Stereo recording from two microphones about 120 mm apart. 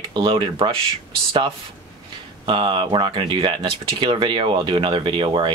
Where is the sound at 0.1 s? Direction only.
40° right (ahead or behind).